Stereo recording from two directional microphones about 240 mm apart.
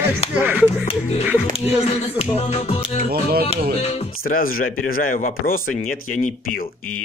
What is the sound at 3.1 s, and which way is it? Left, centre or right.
Speech, right.